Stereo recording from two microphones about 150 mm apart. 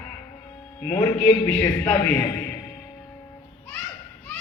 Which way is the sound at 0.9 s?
20° left (ahead or behind).